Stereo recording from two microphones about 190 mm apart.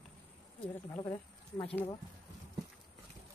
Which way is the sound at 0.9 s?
10° left (ahead or behind).